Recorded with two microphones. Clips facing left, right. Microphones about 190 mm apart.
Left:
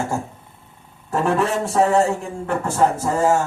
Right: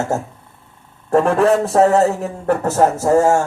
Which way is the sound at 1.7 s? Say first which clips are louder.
Right 4 dB; 55° right (ahead or behind).